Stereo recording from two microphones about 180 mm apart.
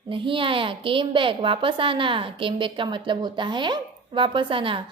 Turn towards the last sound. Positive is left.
turn(degrees=-30)  # may be behind; listen again after turning